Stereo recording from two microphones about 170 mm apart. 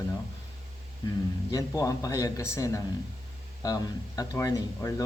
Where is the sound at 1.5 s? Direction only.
20° left (ahead or behind).